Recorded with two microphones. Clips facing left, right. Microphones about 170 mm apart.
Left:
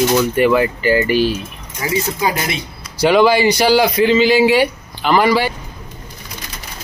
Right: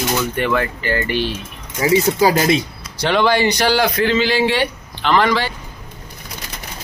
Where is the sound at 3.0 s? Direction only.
10° left (ahead or behind).